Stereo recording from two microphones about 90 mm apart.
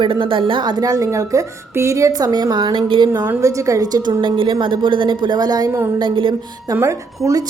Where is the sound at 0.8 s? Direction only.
40° right (ahead or behind).